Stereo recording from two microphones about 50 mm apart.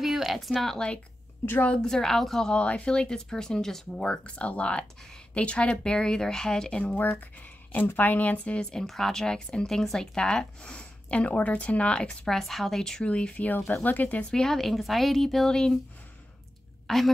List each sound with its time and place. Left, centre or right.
0.0 s a sound: centre
0.7 s speech: left
1.8 s speech: centre
2.5 s speech: left
4.4 s speech: left
6.8 s speech: left
8.7 s speech: centre
12.3 s a woman's voice: centre
13.0 s speech: left
14.3 s a woman's voice: centre
16.8 s a woman's voice: centre